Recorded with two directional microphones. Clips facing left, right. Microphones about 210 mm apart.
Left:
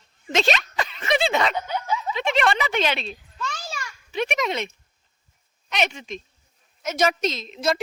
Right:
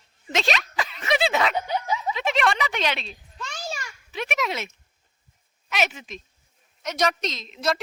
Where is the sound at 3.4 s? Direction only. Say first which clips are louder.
Right 1 dB; 25° right (ahead or behind).